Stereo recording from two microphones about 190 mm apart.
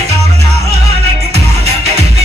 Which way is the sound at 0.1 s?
35° right (ahead or behind).